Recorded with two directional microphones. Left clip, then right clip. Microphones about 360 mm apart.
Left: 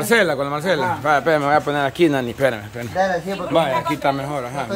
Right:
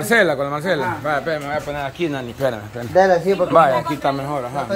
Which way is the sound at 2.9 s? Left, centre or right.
Right.